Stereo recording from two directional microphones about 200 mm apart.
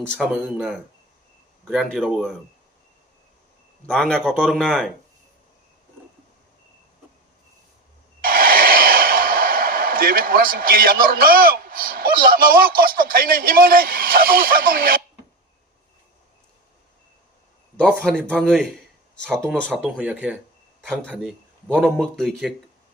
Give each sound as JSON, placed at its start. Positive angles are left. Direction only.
{"t": 0.0, "sound": "speech", "side_deg": 0}
{"t": 3.8, "sound": "speech", "side_deg": 5}
{"t": 8.2, "sound": "speech", "side_deg": -45}
{"t": 17.7, "sound": "speech", "side_deg": 5}